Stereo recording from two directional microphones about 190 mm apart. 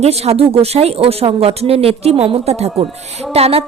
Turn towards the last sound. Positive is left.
turn(degrees=-30)  # may be behind; listen again after turning